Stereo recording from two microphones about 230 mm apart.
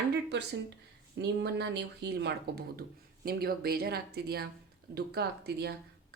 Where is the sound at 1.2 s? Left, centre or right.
Right.